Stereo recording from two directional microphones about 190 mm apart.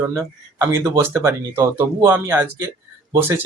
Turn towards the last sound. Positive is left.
turn(degrees=-15)  # may be behind; listen again after turning